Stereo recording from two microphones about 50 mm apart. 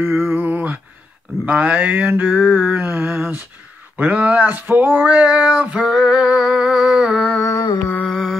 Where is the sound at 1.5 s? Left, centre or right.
Right.